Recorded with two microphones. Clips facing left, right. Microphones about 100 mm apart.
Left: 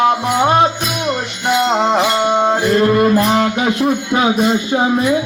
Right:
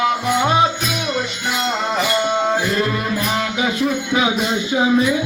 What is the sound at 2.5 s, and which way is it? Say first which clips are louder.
Music: left 6 dB; 50° left (ahead or behind).